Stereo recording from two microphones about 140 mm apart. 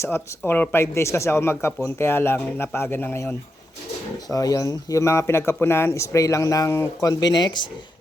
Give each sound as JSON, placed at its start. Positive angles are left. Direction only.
{"t": 0.0, "sound": "speech", "side_deg": 15}
{"t": 4.3, "sound": "speech", "side_deg": 25}